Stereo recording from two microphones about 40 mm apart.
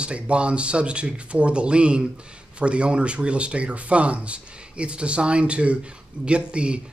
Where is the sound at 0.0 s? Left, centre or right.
Right.